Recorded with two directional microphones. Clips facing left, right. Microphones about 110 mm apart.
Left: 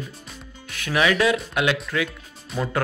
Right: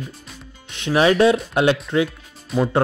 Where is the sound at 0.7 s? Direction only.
25° right (ahead or behind).